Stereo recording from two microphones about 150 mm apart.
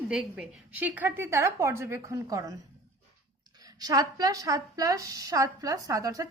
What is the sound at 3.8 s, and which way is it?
A woman's voice, 25° right (ahead or behind).